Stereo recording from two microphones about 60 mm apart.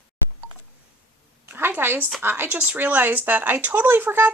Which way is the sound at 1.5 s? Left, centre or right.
Right.